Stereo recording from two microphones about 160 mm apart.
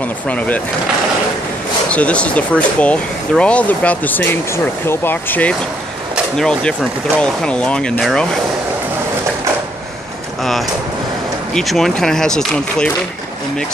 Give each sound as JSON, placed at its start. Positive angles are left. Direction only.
{"t": 1.9, "sound": "speech", "side_deg": 10}
{"t": 11.5, "sound": "speech", "side_deg": 0}